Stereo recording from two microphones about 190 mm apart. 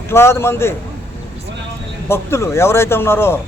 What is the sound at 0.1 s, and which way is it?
Speech, 15° left (ahead or behind).